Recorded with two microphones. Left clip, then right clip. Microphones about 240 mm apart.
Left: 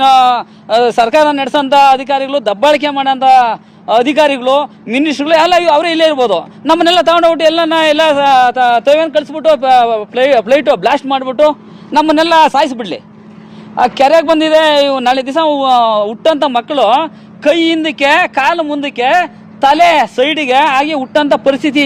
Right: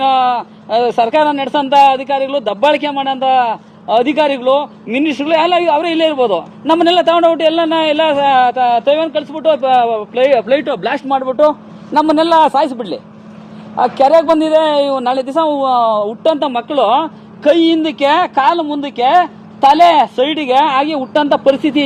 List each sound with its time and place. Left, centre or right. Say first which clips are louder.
0.0 s speech: left 5 dB; left